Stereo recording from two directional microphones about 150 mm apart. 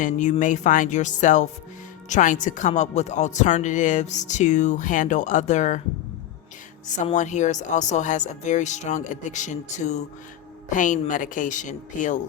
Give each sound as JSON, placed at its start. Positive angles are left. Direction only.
{"t": 0.0, "sound": "speech", "side_deg": 55}
{"t": 6.8, "sound": "speech", "side_deg": 55}